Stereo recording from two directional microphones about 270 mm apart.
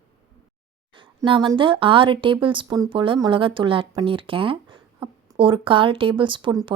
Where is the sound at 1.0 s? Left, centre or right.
Centre.